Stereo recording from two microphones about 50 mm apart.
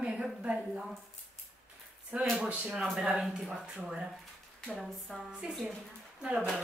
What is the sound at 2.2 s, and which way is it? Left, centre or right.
Speech, centre.